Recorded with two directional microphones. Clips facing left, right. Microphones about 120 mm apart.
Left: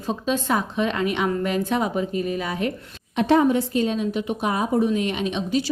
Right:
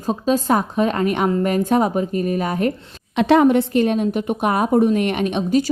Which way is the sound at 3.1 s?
90° right.